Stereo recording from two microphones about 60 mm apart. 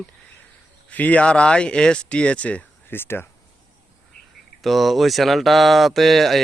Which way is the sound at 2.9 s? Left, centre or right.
Left.